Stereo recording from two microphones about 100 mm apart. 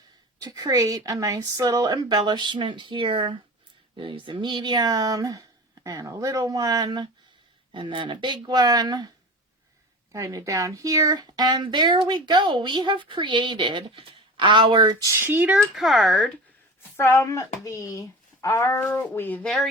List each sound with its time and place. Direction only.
0.3 s speech: 40° right (ahead or behind)
7.7 s speech: 55° right (ahead or behind)
14.9 s speech: 30° right (ahead or behind)
15.5 s speech: centre (ahead or behind)
17.0 s speech: 25° left (ahead or behind)